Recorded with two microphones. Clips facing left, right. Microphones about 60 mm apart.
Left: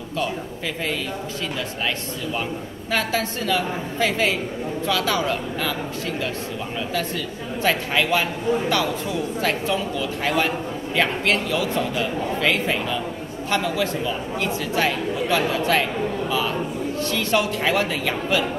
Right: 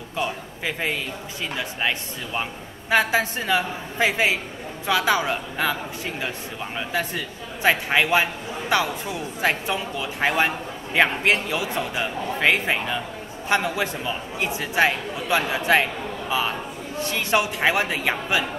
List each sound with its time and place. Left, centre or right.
0.2 s a man's voice: centre
6.9 s a man's voice: centre